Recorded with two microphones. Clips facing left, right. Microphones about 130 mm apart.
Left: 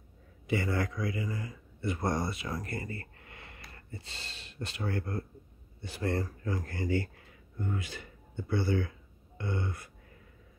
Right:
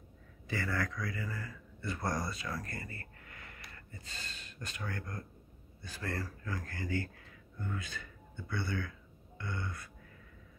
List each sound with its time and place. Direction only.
0.5 s a man's voice: 25° left (ahead or behind)